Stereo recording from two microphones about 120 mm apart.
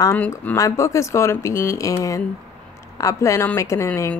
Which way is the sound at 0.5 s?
25° left (ahead or behind).